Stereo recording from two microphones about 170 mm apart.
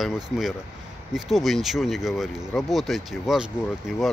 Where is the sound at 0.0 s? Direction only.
Centre (ahead or behind).